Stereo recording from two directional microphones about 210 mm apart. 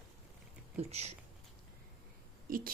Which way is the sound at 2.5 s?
40° right (ahead or behind).